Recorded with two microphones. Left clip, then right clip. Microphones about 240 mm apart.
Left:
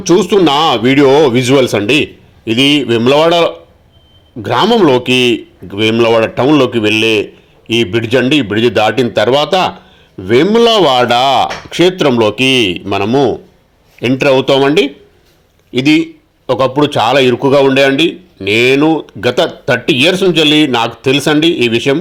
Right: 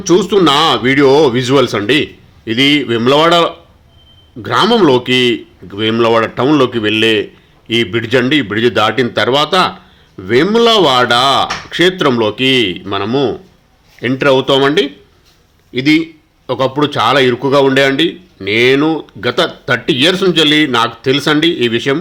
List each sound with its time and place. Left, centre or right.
0.0 s speech: centre